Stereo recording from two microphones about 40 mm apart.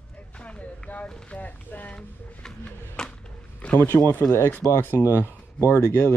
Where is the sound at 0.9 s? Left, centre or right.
Left.